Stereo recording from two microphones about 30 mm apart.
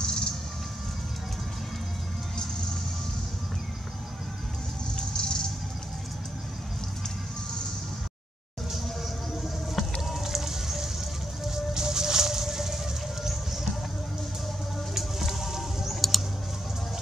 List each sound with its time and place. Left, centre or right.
0.0 s music: left
4.9 s music: left
10.0 s fire: centre
11.4 s music: centre
15.2 s music: centre